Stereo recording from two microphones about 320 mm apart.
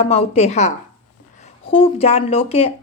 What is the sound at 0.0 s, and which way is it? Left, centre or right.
Speech, centre.